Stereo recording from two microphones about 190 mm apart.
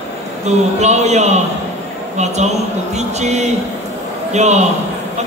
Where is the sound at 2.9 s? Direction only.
35° right (ahead or behind).